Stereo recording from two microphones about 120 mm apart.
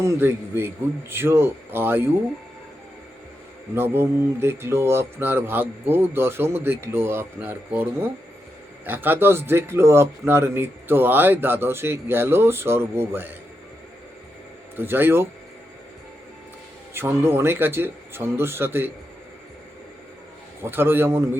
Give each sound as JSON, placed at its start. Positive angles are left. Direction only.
{"t": 0.0, "sound": "speech", "side_deg": -20}
{"t": 3.8, "sound": "speech", "side_deg": -20}
{"t": 14.8, "sound": "speech", "side_deg": -20}
{"t": 16.9, "sound": "speech", "side_deg": -20}
{"t": 20.6, "sound": "speech", "side_deg": -20}